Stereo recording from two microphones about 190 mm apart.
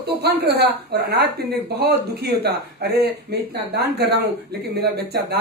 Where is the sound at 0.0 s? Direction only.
60° right (ahead or behind).